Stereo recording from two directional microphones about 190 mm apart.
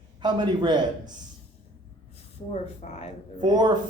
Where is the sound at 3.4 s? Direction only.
20° right (ahead or behind).